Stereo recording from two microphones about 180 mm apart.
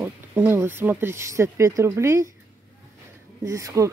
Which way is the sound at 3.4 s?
15° right (ahead or behind).